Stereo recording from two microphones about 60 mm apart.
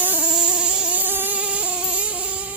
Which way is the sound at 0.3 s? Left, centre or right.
Centre.